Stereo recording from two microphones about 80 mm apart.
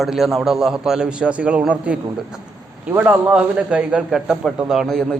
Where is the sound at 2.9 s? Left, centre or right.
Right; by 5.2 s centre.